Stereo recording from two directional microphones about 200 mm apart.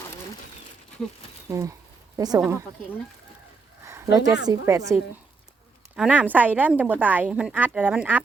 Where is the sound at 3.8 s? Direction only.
15° right (ahead or behind).